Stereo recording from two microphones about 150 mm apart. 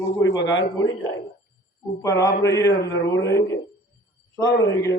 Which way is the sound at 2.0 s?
20° left (ahead or behind).